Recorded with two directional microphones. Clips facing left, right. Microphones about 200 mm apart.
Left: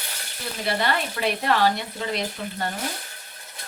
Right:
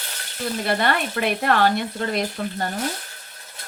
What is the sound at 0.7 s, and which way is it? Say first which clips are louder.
Speech: right 1 dB; 55° right (ahead or behind).